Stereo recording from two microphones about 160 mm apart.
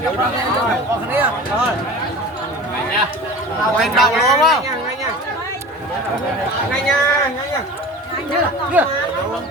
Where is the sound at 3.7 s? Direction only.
Centre (ahead or behind).